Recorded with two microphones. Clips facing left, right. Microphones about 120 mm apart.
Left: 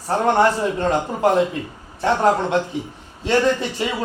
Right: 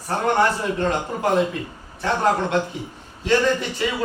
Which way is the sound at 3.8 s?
20° left (ahead or behind).